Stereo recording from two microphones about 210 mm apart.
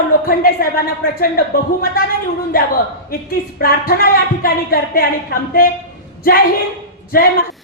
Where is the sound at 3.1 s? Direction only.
45° left (ahead or behind).